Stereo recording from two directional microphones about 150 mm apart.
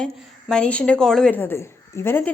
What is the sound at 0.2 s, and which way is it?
A woman's voice, centre (ahead or behind).